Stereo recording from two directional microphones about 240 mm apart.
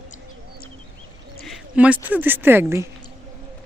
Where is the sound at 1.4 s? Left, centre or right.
Centre.